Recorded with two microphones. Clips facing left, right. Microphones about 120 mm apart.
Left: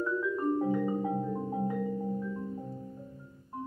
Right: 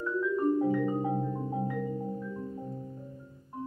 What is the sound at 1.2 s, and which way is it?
Music, centre (ahead or behind).